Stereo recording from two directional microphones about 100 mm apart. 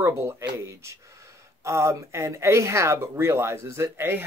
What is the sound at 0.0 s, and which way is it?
Speech, 25° right (ahead or behind).